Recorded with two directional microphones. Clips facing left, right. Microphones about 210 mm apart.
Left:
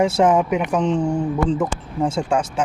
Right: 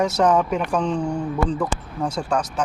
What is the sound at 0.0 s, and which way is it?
Speech, 25° left (ahead or behind).